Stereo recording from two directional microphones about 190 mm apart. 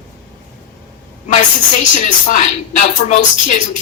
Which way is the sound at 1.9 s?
40° left (ahead or behind).